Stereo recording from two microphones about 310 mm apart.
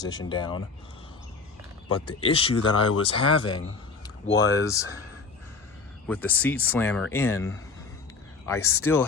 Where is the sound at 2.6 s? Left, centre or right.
Left.